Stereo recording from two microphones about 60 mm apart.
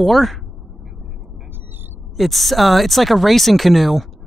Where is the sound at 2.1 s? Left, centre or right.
Centre.